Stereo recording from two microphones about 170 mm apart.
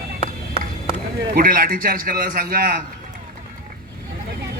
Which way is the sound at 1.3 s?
60° right (ahead or behind).